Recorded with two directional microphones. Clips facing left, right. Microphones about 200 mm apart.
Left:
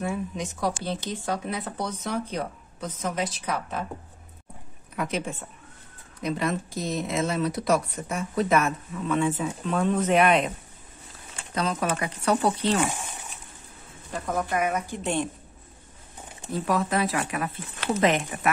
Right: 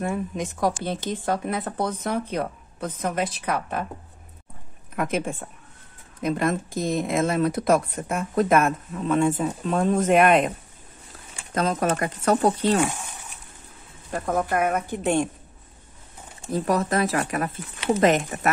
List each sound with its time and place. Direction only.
0.0 s speech: 55° right (ahead or behind)
4.9 s speech: 50° right (ahead or behind)
8.9 s speech: 40° right (ahead or behind)
11.5 s speech: 45° right (ahead or behind)
14.1 s speech: 50° right (ahead or behind)
16.5 s speech: 40° right (ahead or behind)